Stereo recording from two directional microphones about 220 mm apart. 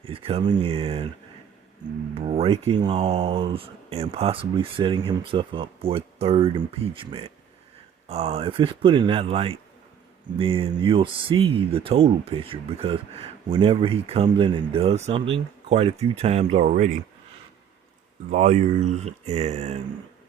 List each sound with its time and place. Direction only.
0.0 s speech: 25° right (ahead or behind)
2.1 s speech: 25° right (ahead or behind)
18.3 s speech: 30° right (ahead or behind)